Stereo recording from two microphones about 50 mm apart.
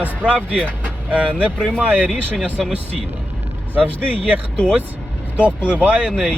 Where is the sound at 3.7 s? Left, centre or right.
Right.